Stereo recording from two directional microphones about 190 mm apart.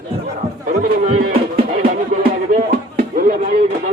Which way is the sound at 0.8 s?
40° right (ahead or behind).